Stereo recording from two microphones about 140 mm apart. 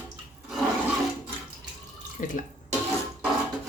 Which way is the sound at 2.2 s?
70° left (ahead or behind).